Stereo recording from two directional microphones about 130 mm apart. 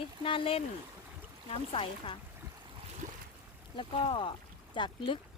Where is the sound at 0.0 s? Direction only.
45° left (ahead or behind).